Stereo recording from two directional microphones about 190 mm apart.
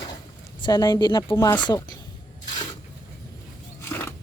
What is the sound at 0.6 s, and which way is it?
Speech, 20° left (ahead or behind).